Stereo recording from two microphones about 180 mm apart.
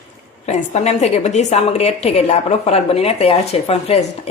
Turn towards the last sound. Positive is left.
turn(degrees=35)  # may be behind; listen again after turning